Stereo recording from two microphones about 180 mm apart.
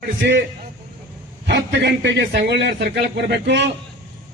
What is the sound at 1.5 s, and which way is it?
A man's voice, 70° right (ahead or behind).